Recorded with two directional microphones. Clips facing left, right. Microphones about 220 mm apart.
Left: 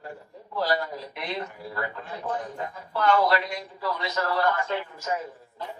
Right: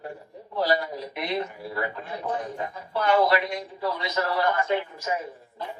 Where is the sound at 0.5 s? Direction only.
15° right (ahead or behind).